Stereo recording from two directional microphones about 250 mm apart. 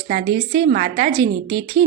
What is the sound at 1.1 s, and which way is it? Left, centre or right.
Speech, right.